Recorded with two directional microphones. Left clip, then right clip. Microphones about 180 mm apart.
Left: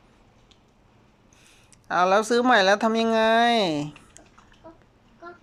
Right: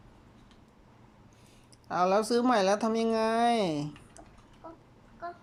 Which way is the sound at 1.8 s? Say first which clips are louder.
Left 6 dB; 5° right (ahead or behind).